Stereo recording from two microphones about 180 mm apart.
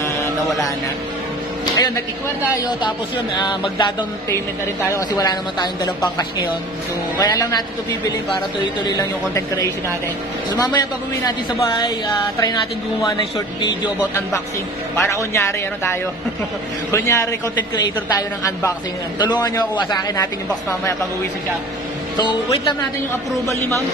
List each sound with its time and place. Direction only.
1.8 s speech: 20° left (ahead or behind)
7.2 s speech: 20° left (ahead or behind)
10.5 s speech: 25° left (ahead or behind)
13.6 s speech: 25° left (ahead or behind)
15.0 s a woman's voice: 15° left (ahead or behind)
22.1 s speech: 25° left (ahead or behind)